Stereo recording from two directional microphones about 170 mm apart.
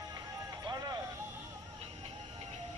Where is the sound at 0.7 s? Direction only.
25° right (ahead or behind).